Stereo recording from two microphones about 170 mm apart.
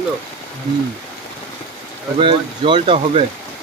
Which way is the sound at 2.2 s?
30° right (ahead or behind).